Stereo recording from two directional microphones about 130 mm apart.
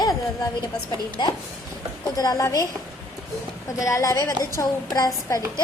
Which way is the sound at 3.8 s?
25° left (ahead or behind).